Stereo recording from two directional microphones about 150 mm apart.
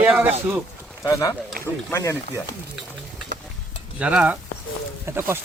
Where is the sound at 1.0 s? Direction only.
20° left (ahead or behind).